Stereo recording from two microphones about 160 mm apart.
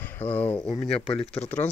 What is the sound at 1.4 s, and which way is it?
Speech, 10° left (ahead or behind).